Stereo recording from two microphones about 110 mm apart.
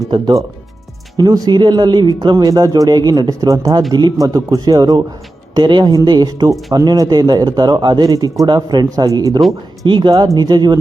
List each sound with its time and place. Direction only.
1.1 s speech: 40° right (ahead or behind)
9.8 s speech: 45° right (ahead or behind)